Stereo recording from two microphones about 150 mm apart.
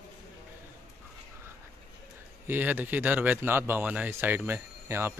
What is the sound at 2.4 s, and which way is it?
Speech, 10° right (ahead or behind).